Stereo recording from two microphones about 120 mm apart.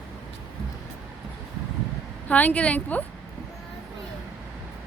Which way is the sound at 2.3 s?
10° left (ahead or behind).